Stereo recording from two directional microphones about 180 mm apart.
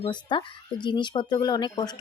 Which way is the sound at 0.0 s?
25° left (ahead or behind).